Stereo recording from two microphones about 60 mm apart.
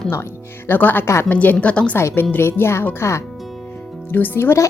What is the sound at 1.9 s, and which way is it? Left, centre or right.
Speech, left.